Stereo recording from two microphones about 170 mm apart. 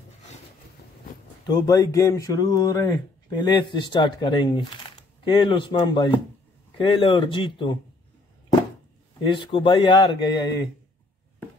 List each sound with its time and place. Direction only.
1.4 s speech: 20° left (ahead or behind)
9.2 s speech: 30° left (ahead or behind)